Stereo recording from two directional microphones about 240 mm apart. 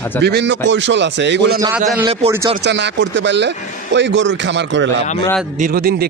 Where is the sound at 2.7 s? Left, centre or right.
Right.